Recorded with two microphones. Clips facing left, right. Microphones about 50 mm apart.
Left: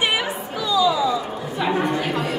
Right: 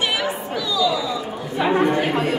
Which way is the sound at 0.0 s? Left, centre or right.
Centre.